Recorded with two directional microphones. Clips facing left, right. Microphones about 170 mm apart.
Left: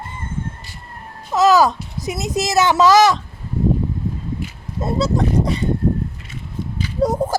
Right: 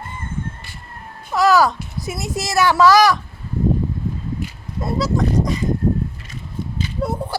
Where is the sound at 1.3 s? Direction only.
20° left (ahead or behind).